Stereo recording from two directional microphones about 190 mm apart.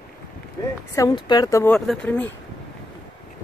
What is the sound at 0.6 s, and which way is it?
A woman's voice, 20° left (ahead or behind).